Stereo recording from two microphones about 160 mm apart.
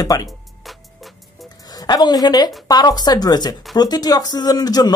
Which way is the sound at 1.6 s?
25° left (ahead or behind).